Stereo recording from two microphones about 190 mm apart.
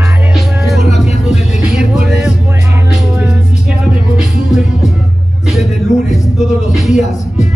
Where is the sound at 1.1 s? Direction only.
35° left (ahead or behind).